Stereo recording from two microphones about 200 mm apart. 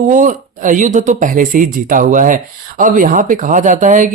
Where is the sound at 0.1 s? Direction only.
40° right (ahead or behind).